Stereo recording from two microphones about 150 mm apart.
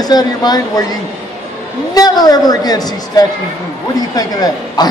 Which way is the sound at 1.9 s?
25° left (ahead or behind).